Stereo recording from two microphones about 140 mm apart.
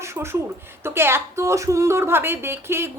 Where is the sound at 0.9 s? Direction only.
15° right (ahead or behind).